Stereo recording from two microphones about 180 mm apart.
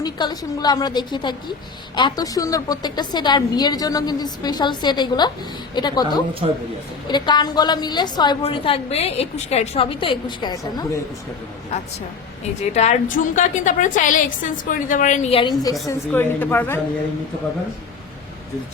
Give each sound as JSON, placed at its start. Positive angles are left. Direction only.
{"t": 0.0, "sound": "a woman's voice", "side_deg": 25}
{"t": 11.7, "sound": "a woman's voice", "side_deg": 35}
{"t": 15.9, "sound": "a woman's voice", "side_deg": 10}